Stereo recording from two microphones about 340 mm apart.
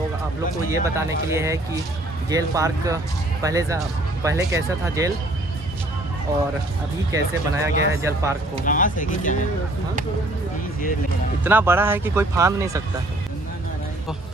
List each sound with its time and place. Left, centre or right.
0.7 s speech: centre
7.1 s speech: centre
8.6 s speech: left
11.4 s speech: centre